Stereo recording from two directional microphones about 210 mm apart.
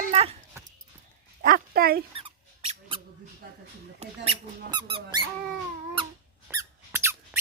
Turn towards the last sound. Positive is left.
turn(degrees=-10)  # may be behind; listen again after turning